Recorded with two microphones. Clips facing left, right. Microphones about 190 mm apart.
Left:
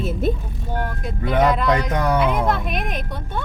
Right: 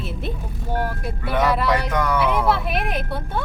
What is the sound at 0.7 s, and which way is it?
A woman's voice, 10° right (ahead or behind).